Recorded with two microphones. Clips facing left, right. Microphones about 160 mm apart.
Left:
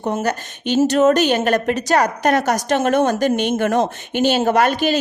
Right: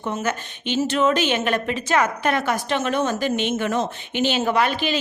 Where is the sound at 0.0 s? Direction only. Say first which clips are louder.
Left 4 dB; 40° left (ahead or behind).